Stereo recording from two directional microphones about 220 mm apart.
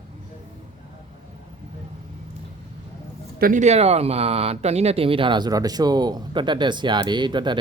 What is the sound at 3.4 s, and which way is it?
Speech, 35° right (ahead or behind).